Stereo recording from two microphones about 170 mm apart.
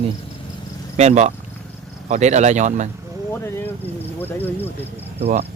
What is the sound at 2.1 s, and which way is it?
Speech, 45° right (ahead or behind).